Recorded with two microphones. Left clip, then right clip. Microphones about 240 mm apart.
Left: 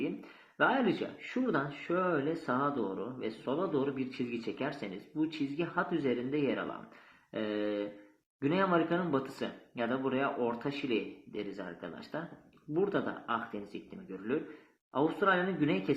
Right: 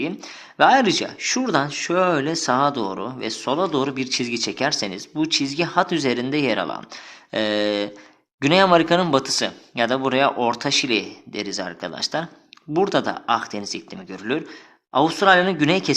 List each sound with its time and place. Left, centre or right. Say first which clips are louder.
0.5 s speech: right 14 dB; right